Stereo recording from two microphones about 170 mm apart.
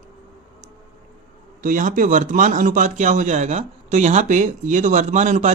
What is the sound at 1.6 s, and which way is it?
Speech, 50° right (ahead or behind).